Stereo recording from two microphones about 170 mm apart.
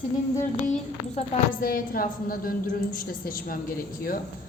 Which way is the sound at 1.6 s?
60° left (ahead or behind).